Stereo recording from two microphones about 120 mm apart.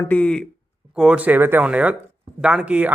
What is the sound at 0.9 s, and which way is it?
Speech, 10° right (ahead or behind).